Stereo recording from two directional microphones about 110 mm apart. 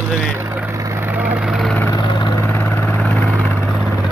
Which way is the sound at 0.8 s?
20° right (ahead or behind).